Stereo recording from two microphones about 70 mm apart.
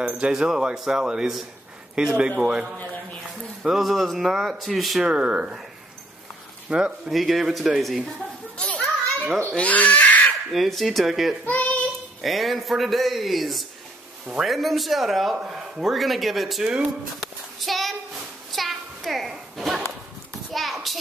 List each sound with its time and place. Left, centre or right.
0.0 s speech: centre
3.6 s a man's voice: centre
5.0 s speech: centre
6.7 s a man's voice: centre
8.5 s children playing: centre
9.6 s speech: left
10.3 s a man's voice: centre
11.4 s child singing: left
12.2 s a man's voice: centre
17.2 s child singing: centre
18.5 s a sound: centre
20.5 s hands: centre